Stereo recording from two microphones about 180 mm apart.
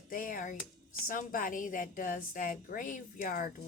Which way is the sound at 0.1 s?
50° left (ahead or behind).